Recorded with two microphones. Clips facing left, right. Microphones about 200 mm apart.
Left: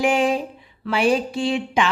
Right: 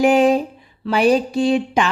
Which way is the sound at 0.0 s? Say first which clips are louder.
Right 6 dB; 40° right (ahead or behind).